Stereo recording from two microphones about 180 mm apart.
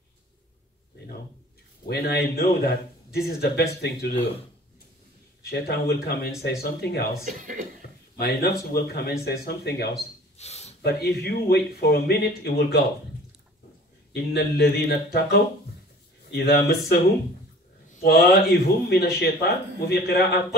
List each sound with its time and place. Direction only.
1.9 s a man's voice: 60° left (ahead or behind)
5.4 s a man's voice: 60° left (ahead or behind)
7.2 s speech: 45° right (ahead or behind)
7.8 s a sound: 60° left (ahead or behind)
8.2 s a man's voice: 65° left (ahead or behind)
10.3 s a sound: 35° left (ahead or behind)
10.8 s a man's voice: 60° left (ahead or behind)
14.1 s a man's voice: 60° left (ahead or behind)
16.3 s a man's voice: 65° left (ahead or behind)
18.0 s a man's voice: 60° left (ahead or behind)